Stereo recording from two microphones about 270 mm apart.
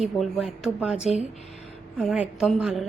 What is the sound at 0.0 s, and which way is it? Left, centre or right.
Speech, centre.